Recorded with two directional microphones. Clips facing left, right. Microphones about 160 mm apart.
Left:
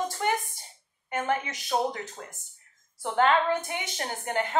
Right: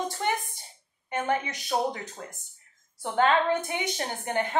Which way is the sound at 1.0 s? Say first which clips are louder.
Right 1 dB; 20° right (ahead or behind).